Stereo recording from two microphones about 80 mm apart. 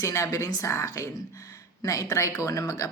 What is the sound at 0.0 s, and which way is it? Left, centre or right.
A woman's voice, left.